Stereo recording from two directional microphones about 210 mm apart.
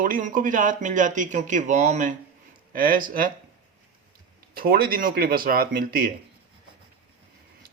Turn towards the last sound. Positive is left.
turn(degrees=-45)  # may be behind; listen again after turning